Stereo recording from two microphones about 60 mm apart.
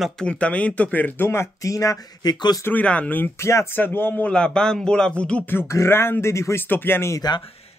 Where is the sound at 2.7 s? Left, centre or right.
Left.